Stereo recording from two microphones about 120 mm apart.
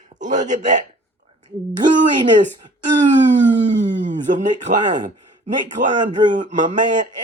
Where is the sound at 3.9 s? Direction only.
90° right.